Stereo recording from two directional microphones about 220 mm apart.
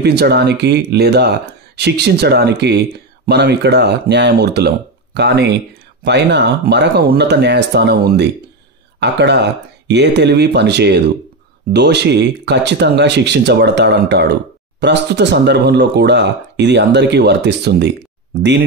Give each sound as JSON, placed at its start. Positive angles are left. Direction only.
{"t": 0.0, "sound": "speech", "side_deg": -50}